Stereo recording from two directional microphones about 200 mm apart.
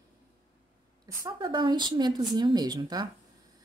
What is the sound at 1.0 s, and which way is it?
A woman's voice, 20° right (ahead or behind).